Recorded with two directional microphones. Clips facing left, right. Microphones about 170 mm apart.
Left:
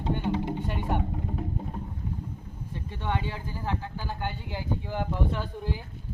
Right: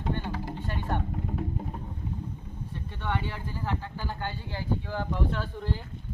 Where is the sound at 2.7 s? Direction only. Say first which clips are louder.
Left 1 dB; 15° left (ahead or behind).